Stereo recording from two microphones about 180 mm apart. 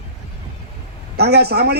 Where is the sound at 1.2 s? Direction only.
65° right (ahead or behind).